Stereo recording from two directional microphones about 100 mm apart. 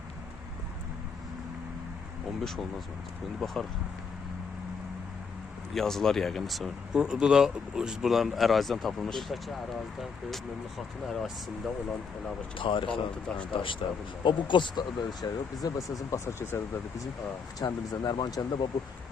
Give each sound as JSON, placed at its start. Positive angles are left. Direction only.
{"t": 2.4, "sound": "speech", "side_deg": 5}
{"t": 5.7, "sound": "speech", "side_deg": 5}
{"t": 12.5, "sound": "speech", "side_deg": 60}
{"t": 13.2, "sound": "speech", "side_deg": 10}
{"t": 13.5, "sound": "speech", "side_deg": 60}
{"t": 17.6, "sound": "speech", "side_deg": 40}